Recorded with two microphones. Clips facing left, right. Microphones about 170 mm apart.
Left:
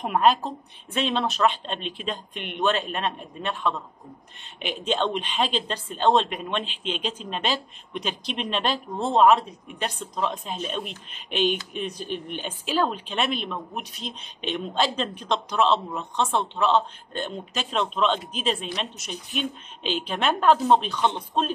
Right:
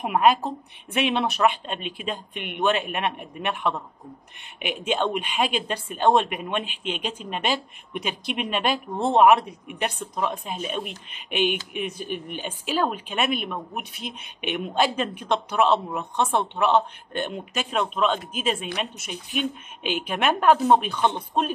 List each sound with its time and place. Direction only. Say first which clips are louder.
0.0 s speech: right 1 dB; 10° right (ahead or behind)
13.9 s speech: right 1 dB; 60° right (ahead or behind)
14.5 s speech: right 2 dB; 10° right (ahead or behind)